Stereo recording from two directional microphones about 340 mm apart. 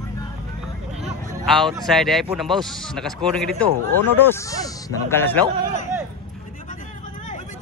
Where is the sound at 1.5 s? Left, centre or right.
Centre.